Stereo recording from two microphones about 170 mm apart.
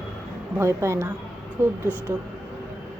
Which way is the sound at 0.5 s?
15° right (ahead or behind).